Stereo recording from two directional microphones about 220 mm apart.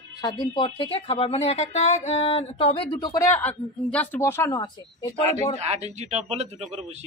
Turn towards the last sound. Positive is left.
turn(degrees=-30)  # may be behind; listen again after turning